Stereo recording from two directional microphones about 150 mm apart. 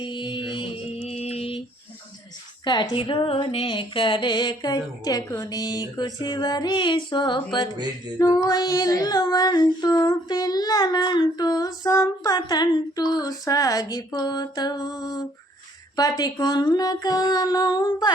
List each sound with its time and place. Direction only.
0.0 s mantra: 30° left (ahead or behind)
1.1 s mantra: 45° left (ahead or behind)
2.6 s female singing: 30° left (ahead or behind)